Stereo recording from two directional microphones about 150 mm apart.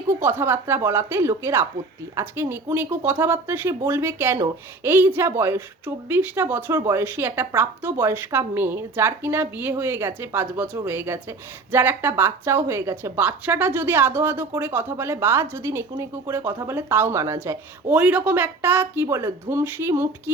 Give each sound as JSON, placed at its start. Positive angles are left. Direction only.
{"t": 0.2, "sound": "a woman's voice", "side_deg": -15}